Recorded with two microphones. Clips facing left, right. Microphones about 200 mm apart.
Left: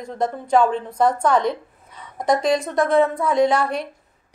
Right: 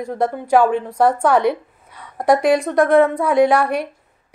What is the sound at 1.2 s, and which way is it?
Speech, 65° right (ahead or behind).